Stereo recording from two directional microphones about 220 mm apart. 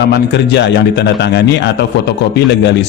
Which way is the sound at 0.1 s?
50° left (ahead or behind).